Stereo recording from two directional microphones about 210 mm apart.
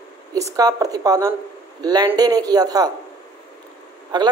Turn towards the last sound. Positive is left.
turn(degrees=-20)  # may be behind; listen again after turning